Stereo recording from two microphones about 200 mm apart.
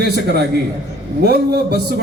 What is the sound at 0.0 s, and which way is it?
A man's voice, 55° right (ahead or behind).